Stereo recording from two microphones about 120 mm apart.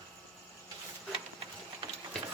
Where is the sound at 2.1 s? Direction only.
Centre (ahead or behind).